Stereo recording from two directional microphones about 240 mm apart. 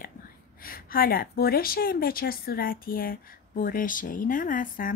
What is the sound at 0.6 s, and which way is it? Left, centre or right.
A woman's voice, left.